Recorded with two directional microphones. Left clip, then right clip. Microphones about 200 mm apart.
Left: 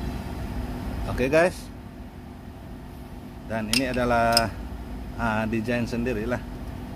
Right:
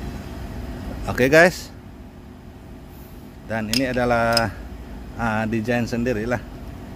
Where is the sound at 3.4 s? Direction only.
45° right (ahead or behind).